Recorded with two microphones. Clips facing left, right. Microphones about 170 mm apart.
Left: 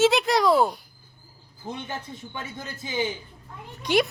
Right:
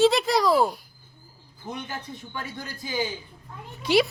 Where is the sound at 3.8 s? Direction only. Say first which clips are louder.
Right 1 dB; 5° right (ahead or behind).